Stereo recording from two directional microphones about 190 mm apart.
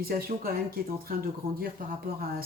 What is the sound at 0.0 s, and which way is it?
Speech, 50° right (ahead or behind).